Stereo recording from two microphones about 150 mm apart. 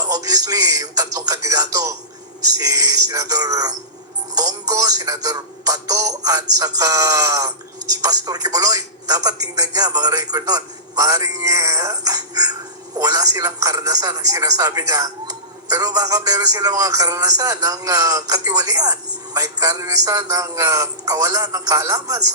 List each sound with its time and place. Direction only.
0.0 s speech: 25° right (ahead or behind)